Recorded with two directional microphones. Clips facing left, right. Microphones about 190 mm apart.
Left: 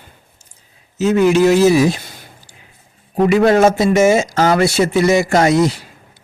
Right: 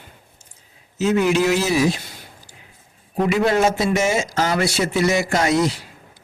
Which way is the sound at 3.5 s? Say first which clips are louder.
Left 6 dB; 45° left (ahead or behind).